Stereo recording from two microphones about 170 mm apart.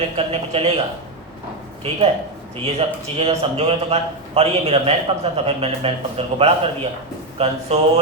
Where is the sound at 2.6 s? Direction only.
35° right (ahead or behind).